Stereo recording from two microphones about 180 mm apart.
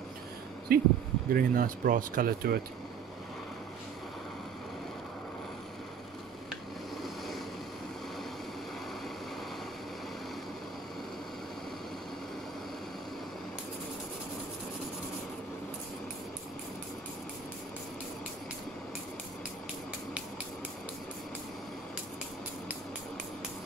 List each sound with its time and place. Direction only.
0.7 s speech: 55° right (ahead or behind)
7.0 s vehicle: centre (ahead or behind)